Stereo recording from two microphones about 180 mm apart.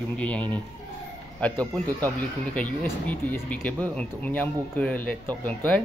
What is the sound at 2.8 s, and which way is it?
Speech, 10° left (ahead or behind).